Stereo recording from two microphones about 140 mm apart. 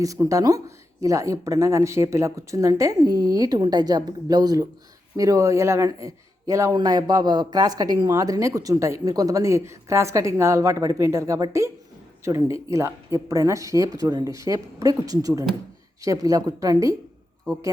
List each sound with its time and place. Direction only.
0.0 s speech: 25° right (ahead or behind)